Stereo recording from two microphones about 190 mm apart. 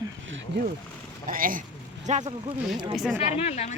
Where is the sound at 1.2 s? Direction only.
45° right (ahead or behind).